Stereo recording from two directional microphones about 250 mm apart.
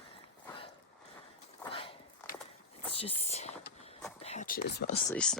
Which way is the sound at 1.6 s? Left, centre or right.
Left.